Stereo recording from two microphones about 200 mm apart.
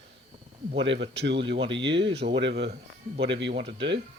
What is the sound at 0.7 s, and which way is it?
Speech, 60° right (ahead or behind).